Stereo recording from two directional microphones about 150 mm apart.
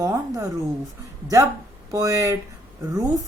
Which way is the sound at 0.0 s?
20° right (ahead or behind).